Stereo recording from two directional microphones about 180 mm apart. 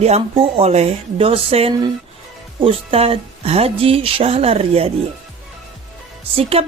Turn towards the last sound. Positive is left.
turn(degrees=-35)  # may be behind; listen again after turning